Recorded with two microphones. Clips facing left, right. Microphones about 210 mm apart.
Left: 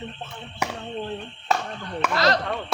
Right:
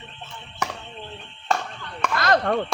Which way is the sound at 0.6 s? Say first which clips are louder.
Left 1 dB; 10° left (ahead or behind).